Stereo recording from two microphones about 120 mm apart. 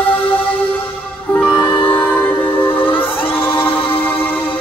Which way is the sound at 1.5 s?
40° left (ahead or behind).